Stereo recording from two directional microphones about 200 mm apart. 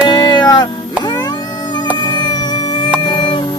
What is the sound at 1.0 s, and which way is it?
Cat, 20° left (ahead or behind).